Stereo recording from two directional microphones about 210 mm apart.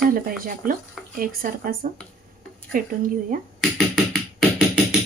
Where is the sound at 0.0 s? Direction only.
45° right (ahead or behind).